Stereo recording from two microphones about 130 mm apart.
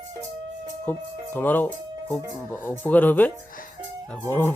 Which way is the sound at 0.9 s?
15° left (ahead or behind).